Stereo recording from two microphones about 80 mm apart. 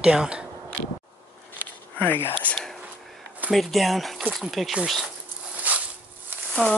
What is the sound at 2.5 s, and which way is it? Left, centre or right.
Whispering, centre.